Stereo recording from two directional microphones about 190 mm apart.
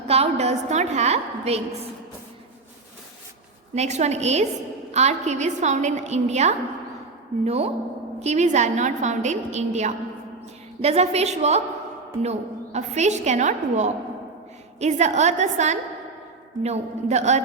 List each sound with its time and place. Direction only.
0.1 s a woman's voice: 35° right (ahead or behind)
3.8 s a woman's voice: 35° right (ahead or behind)